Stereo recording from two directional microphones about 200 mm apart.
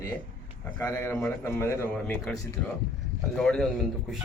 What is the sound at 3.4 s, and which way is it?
Speech, 5° left (ahead or behind).